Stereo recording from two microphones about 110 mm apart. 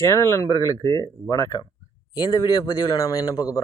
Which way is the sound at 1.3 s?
35° left (ahead or behind).